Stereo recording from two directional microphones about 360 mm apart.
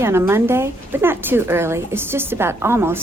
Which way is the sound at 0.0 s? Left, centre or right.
Centre.